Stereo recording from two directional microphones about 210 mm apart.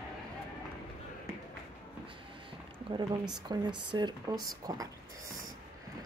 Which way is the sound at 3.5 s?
20° right (ahead or behind).